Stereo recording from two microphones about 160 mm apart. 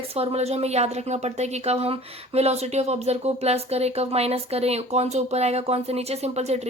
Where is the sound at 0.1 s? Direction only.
40° right (ahead or behind).